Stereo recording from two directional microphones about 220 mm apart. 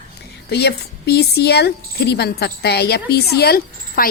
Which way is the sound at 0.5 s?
50° left (ahead or behind).